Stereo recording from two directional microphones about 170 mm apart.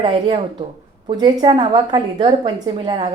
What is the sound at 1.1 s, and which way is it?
A woman's voice, 25° right (ahead or behind).